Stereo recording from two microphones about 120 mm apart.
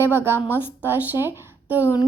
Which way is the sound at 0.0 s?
20° right (ahead or behind).